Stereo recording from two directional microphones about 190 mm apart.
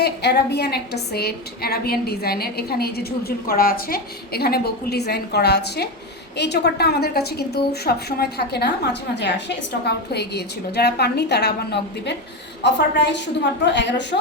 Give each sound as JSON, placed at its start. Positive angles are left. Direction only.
{"t": 0.0, "sound": "a woman's voice", "side_deg": 60}